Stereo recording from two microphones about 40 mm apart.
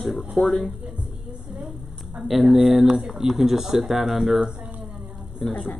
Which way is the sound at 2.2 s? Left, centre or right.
Centre.